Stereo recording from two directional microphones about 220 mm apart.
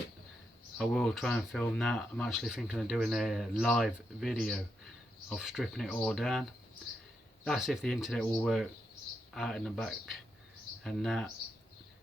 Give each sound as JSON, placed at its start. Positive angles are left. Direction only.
{"t": 0.8, "sound": "speech", "side_deg": 0}